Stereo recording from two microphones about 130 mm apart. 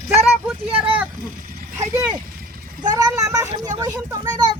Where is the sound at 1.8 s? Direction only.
25° right (ahead or behind).